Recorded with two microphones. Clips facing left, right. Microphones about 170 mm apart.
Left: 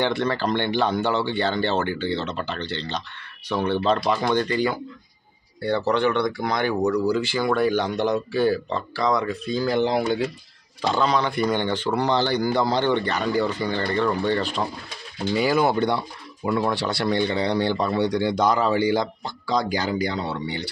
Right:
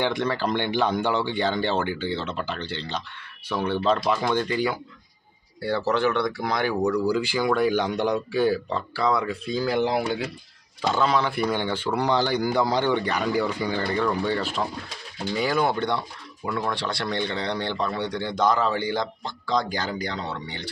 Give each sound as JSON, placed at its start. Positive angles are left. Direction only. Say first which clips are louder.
{"t": 0.0, "sound": "speech", "louder": "left 2 dB", "side_deg": -10}
{"t": 15.3, "sound": "speech", "louder": "left 3 dB", "side_deg": 5}